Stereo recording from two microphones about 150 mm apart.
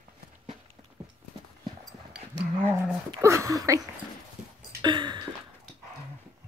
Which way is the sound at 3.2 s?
20° right (ahead or behind).